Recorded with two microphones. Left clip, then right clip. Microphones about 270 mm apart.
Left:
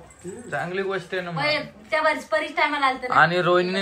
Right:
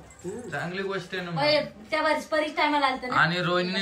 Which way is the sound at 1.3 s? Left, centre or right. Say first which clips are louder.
Right 2 dB; centre.